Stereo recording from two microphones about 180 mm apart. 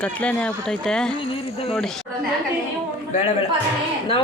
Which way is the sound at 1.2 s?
30° left (ahead or behind).